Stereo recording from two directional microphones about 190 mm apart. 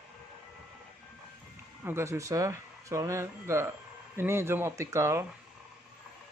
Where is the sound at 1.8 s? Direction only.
15° right (ahead or behind).